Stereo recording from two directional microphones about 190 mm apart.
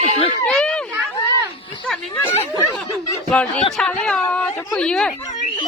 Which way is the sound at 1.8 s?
10° left (ahead or behind).